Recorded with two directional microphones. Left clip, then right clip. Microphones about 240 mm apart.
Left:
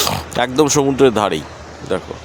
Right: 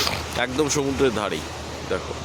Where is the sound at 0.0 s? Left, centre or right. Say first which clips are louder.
Left 6 dB; left.